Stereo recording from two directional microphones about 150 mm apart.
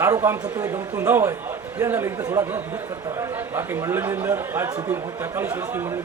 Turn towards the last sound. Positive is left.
turn(degrees=-15)  # may be behind; listen again after turning